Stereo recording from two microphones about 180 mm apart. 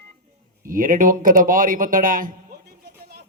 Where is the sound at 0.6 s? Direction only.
50° right (ahead or behind).